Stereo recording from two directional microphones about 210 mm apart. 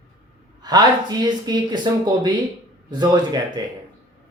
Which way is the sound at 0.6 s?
20° right (ahead or behind).